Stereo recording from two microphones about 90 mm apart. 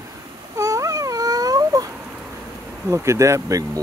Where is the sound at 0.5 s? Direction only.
35° right (ahead or behind).